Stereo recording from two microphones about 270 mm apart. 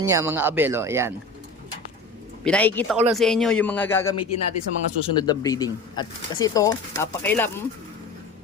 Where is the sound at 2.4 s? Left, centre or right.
Centre.